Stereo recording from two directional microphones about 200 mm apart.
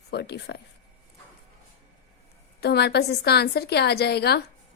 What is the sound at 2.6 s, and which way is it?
A woman's voice, 55° left (ahead or behind).